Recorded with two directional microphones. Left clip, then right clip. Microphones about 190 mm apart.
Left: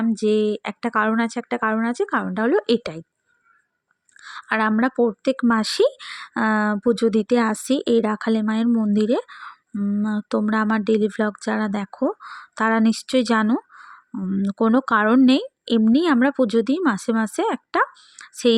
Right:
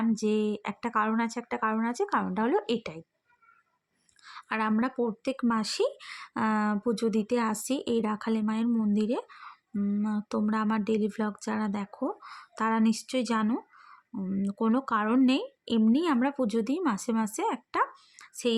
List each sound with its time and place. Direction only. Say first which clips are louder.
0.0 s speech: left 8 dB; 25° left (ahead or behind)
4.2 s speech: left 9 dB; 35° left (ahead or behind)